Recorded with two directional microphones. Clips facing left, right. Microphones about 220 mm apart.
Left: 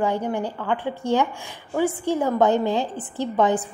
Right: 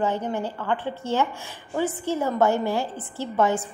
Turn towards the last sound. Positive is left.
turn(degrees=15)  # may be behind; listen again after turning